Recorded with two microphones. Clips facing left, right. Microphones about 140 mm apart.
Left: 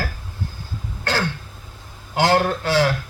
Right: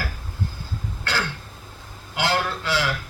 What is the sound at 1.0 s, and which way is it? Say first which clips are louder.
Throat clearing: left 4 dB; 45° left (ahead or behind).